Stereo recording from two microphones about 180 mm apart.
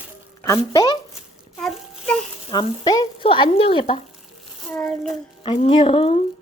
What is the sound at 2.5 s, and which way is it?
Speech, 20° left (ahead or behind).